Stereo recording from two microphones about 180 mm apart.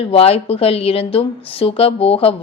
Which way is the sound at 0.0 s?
30° left (ahead or behind).